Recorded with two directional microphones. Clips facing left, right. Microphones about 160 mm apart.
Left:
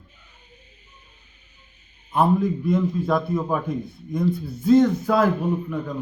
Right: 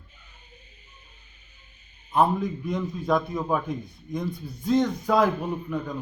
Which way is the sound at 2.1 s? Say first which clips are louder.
Left 3 dB; 5° left (ahead or behind).